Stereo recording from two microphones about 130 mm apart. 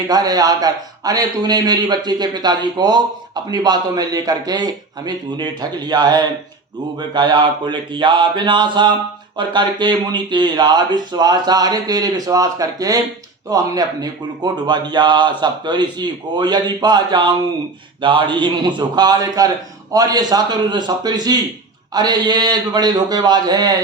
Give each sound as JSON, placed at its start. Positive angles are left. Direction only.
{"t": 0.1, "sound": "a man's voice", "side_deg": -30}